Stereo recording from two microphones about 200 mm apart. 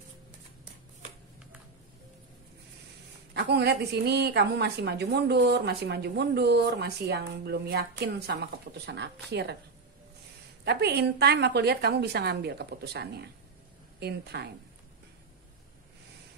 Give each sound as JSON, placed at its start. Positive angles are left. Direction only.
{"t": 3.3, "sound": "a woman's voice", "side_deg": -55}
{"t": 10.6, "sound": "a woman's voice", "side_deg": -55}